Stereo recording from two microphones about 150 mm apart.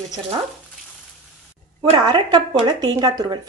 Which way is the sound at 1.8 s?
30° right (ahead or behind).